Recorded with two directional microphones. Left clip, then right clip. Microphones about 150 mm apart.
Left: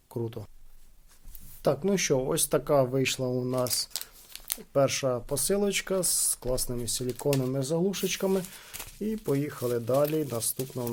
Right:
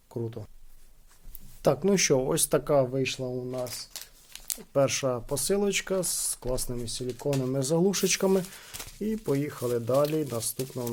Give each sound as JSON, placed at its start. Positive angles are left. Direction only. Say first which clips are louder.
{"t": 0.1, "sound": "speech", "louder": "even", "side_deg": 10}
{"t": 1.6, "sound": "speech", "louder": "right 2 dB", "side_deg": -15}
{"t": 2.9, "sound": "speech", "louder": "left 2 dB", "side_deg": 30}
{"t": 3.2, "sound": "speech", "louder": "left 3 dB", "side_deg": 45}
{"t": 3.5, "sound": "speech", "louder": "left 5 dB", "side_deg": 65}
{"t": 4.4, "sound": "speech", "louder": "even", "side_deg": 0}
{"t": 6.8, "sound": "speech", "louder": "left 2 dB", "side_deg": 20}
{"t": 7.4, "sound": "speech", "louder": "right 2 dB", "side_deg": -5}
{"t": 7.9, "sound": "speech", "louder": "right 3 dB", "side_deg": -20}